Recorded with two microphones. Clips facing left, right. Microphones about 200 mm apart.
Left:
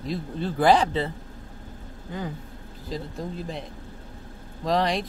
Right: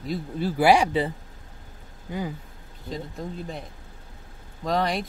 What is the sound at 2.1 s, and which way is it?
Speech, 15° right (ahead or behind).